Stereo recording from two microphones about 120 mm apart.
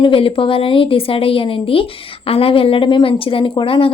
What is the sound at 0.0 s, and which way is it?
A woman's voice, 50° left (ahead or behind).